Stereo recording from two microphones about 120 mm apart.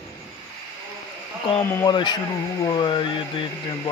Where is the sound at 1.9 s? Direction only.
40° left (ahead or behind).